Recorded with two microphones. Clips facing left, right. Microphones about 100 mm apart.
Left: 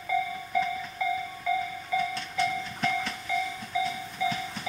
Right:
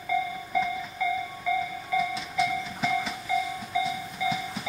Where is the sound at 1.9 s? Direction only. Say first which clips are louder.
Right 2 dB; centre (ahead or behind).